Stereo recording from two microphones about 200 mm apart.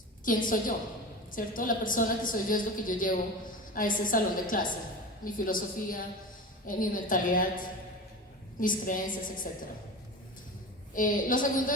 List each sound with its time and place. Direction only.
0.3 s a woman's voice: 45° left (ahead or behind)
10.9 s a woman's voice: 40° left (ahead or behind)